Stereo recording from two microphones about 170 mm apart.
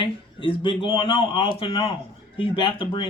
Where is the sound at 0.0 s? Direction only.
30° left (ahead or behind).